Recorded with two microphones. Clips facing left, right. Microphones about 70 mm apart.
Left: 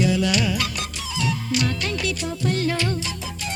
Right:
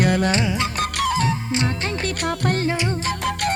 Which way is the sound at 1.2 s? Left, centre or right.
Right.